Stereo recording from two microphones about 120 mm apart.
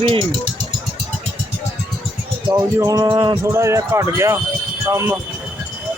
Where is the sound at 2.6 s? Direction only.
25° right (ahead or behind).